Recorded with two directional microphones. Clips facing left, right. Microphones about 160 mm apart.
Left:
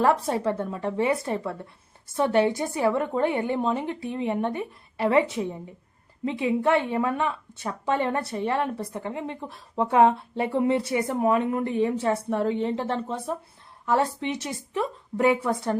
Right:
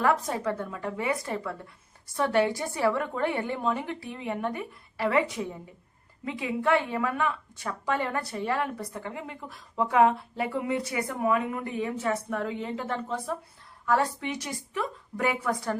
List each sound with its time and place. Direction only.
0.0 s a woman's voice: 30° left (ahead or behind)